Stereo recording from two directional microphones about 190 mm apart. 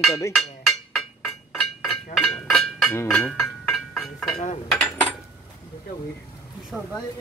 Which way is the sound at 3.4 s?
Centre (ahead or behind).